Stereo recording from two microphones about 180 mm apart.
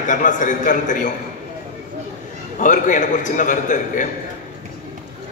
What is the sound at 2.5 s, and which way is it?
A man's voice, 45° left (ahead or behind).